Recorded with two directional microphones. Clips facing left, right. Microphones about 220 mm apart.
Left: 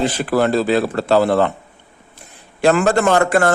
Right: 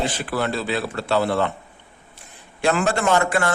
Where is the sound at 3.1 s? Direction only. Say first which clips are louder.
Left 5 dB; 50° left (ahead or behind).